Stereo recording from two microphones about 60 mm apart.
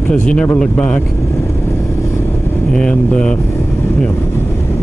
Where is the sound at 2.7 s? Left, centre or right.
Centre.